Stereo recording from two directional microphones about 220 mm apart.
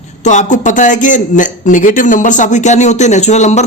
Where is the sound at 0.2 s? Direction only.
35° left (ahead or behind).